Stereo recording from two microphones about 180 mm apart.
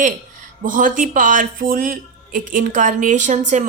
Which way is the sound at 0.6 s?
45° right (ahead or behind).